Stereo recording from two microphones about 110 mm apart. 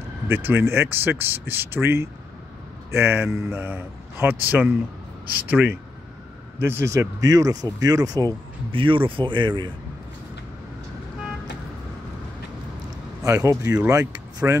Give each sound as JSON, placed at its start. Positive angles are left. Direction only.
{"t": 0.3, "sound": "a man's voice", "side_deg": -20}
{"t": 8.7, "sound": "speech", "side_deg": -50}
{"t": 13.2, "sound": "a man's voice", "side_deg": -30}